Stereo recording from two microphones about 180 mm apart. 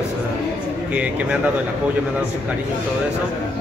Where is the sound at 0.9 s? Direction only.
10° right (ahead or behind).